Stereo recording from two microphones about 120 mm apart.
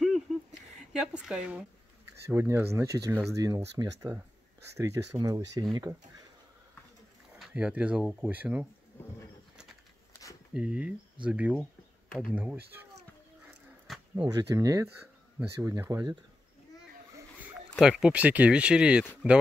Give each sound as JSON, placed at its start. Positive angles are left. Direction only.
{"t": 0.0, "sound": "a sound", "side_deg": 0}
{"t": 0.9, "sound": "speech", "side_deg": -5}
{"t": 2.2, "sound": "speech", "side_deg": -20}
{"t": 7.3, "sound": "speech", "side_deg": -5}
{"t": 8.0, "sound": "speech", "side_deg": 0}
{"t": 8.3, "sound": "speech", "side_deg": -15}
{"t": 10.5, "sound": "speech", "side_deg": -10}
{"t": 13.9, "sound": "a sound", "side_deg": 0}
{"t": 14.3, "sound": "speech", "side_deg": -30}
{"t": 17.7, "sound": "speech", "side_deg": -5}